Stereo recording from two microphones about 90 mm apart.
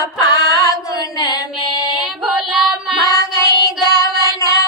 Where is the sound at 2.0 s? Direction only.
5° right (ahead or behind).